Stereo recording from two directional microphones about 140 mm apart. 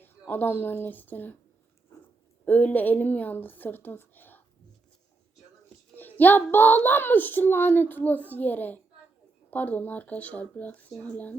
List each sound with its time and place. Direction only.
0.0 s a woman's voice: 15° left (ahead or behind)
2.4 s speech: 10° left (ahead or behind)
6.0 s speech: 15° left (ahead or behind)